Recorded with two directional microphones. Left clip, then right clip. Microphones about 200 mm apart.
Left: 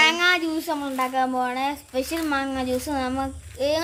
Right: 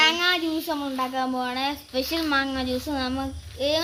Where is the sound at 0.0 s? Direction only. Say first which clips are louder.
Left 2 dB; 5° left (ahead or behind).